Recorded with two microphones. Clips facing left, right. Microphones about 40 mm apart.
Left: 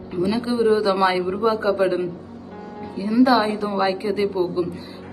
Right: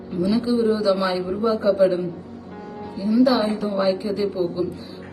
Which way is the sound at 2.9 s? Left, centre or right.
Left.